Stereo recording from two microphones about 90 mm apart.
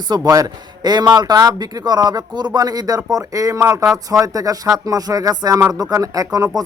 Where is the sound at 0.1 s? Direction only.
45° right (ahead or behind).